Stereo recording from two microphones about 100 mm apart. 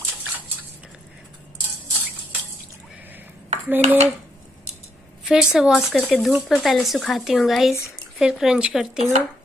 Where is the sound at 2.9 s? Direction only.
20° right (ahead or behind).